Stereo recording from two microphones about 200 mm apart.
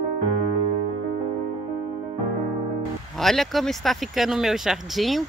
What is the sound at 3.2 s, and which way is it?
Speech, centre (ahead or behind).